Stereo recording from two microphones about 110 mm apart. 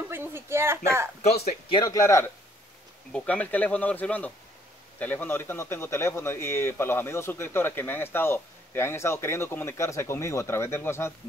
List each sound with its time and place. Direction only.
0.1 s a sound: 20° right (ahead or behind)
1.2 s speech: 75° left (ahead or behind)
1.9 s a man's voice: 25° left (ahead or behind)
3.1 s a man's voice: 10° left (ahead or behind)